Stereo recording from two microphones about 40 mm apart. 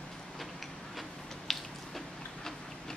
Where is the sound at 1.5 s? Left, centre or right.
Centre.